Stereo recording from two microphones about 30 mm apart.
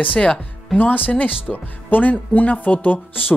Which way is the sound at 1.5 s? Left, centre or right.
Left.